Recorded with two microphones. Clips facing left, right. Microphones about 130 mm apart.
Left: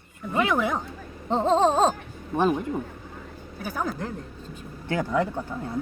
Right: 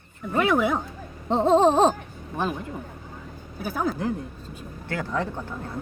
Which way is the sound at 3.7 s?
5° right (ahead or behind).